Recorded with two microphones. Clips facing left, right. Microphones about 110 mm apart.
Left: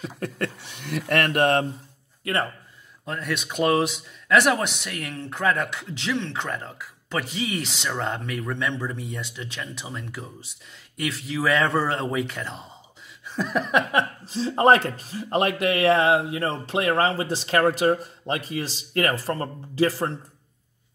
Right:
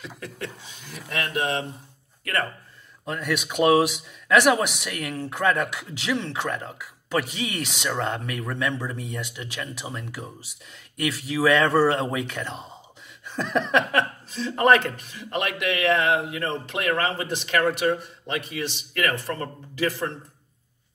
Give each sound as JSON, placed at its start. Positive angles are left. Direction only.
{"t": 0.2, "sound": "speech", "side_deg": 60}
{"t": 3.1, "sound": "speech", "side_deg": 0}
{"t": 14.2, "sound": "speech", "side_deg": 30}